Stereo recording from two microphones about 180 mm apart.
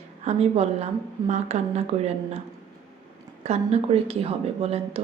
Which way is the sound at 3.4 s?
35° right (ahead or behind).